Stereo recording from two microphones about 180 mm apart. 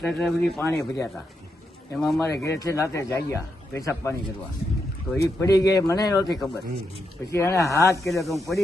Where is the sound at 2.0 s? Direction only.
Centre (ahead or behind).